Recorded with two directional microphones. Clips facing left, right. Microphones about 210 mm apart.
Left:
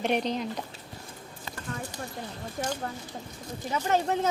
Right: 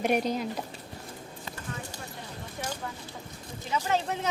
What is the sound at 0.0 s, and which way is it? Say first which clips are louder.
Speech: right 1 dB; 10° right (ahead or behind).